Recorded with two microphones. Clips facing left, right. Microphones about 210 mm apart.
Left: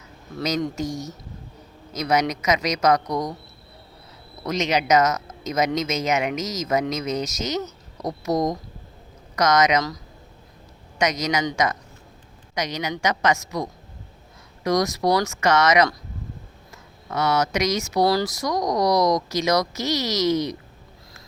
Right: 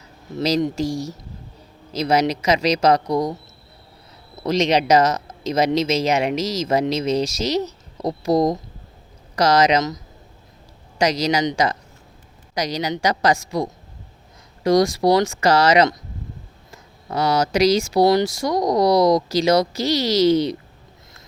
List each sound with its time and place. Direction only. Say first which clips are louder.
0.3 s speech: right 5 dB; 25° right (ahead or behind)
4.4 s speech: right 4 dB; 35° right (ahead or behind)